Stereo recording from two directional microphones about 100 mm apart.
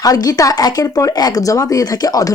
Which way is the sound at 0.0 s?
35° left (ahead or behind).